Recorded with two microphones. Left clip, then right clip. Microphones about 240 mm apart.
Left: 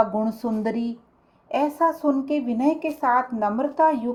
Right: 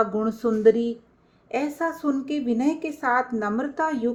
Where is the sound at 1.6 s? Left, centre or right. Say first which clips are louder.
Left 7 dB; left.